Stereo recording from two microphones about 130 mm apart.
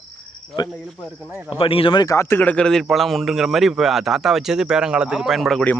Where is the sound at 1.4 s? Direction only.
45° left (ahead or behind).